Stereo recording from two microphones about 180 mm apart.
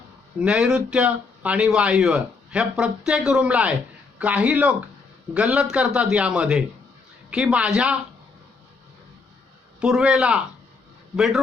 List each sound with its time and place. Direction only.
0.3 s speech: 5° right (ahead or behind)
9.8 s speech: 5° right (ahead or behind)